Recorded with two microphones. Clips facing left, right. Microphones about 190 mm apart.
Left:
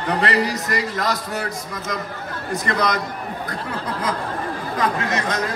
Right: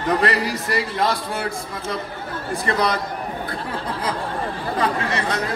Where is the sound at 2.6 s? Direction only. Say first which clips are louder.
Right 1 dB; 35° right (ahead or behind).